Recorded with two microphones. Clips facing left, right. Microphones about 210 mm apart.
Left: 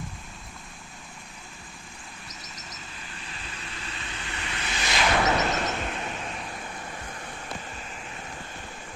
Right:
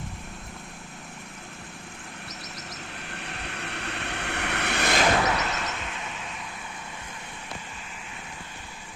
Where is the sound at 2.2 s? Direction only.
60° right (ahead or behind).